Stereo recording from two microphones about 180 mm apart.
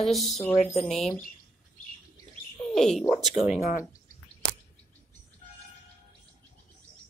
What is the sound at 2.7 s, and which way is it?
Speech, centre (ahead or behind).